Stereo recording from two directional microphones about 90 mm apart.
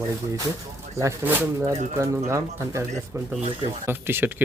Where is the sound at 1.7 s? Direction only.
35° right (ahead or behind).